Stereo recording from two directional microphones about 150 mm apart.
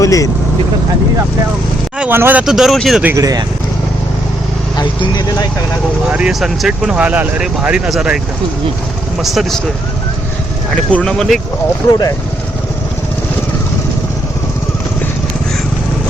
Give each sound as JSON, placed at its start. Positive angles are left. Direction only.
{"t": 0.0, "sound": "speech", "side_deg": 20}
{"t": 2.0, "sound": "speech", "side_deg": -15}
{"t": 2.5, "sound": "speech", "side_deg": 0}
{"t": 3.0, "sound": "speech", "side_deg": -20}
{"t": 4.8, "sound": "speech", "side_deg": 30}
{"t": 6.1, "sound": "speech", "side_deg": -5}
{"t": 9.2, "sound": "speech", "side_deg": 0}
{"t": 10.9, "sound": "speech", "side_deg": 5}